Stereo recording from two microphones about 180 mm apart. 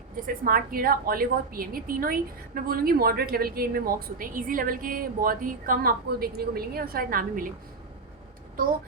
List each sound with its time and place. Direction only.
0.2 s a woman's voice: 50° right (ahead or behind)